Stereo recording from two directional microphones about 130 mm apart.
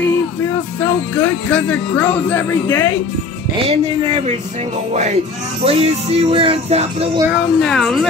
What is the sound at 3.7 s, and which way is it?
Music, 45° right (ahead or behind).